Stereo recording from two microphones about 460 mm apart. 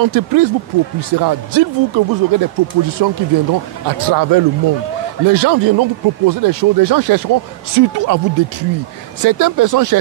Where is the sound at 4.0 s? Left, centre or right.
Right.